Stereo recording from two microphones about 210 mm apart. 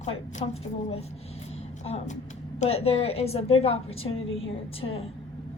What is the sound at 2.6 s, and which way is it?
A woman's voice, 30° left (ahead or behind).